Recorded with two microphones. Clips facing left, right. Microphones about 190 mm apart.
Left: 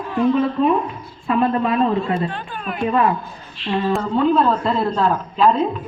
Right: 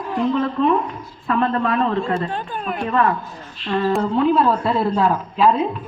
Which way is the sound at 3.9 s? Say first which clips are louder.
Even; 5° right (ahead or behind).